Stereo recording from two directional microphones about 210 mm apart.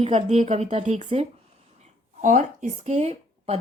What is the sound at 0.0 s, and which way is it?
Speech, 30° right (ahead or behind).